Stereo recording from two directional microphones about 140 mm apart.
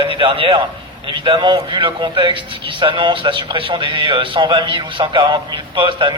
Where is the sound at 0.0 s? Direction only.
40° right (ahead or behind).